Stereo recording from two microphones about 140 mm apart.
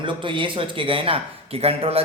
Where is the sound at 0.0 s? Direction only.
35° right (ahead or behind).